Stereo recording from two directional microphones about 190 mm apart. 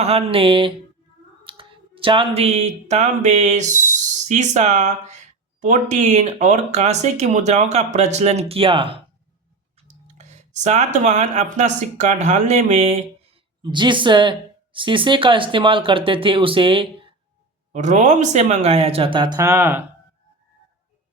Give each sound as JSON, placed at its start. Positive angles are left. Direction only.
{"t": 0.0, "sound": "speech", "side_deg": -35}
{"t": 13.6, "sound": "speech", "side_deg": -25}
{"t": 17.7, "sound": "speech", "side_deg": -40}